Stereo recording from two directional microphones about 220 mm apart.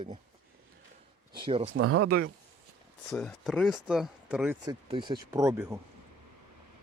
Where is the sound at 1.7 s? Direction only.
85° right.